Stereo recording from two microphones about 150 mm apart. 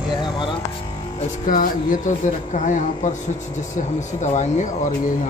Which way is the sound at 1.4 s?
65° left (ahead or behind).